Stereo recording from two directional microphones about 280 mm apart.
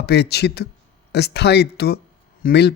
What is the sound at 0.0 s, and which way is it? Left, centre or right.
Speech, left.